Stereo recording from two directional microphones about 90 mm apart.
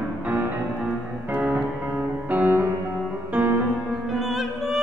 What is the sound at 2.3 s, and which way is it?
Music, 20° right (ahead or behind).